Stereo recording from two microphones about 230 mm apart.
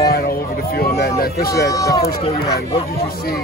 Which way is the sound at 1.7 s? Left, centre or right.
Centre.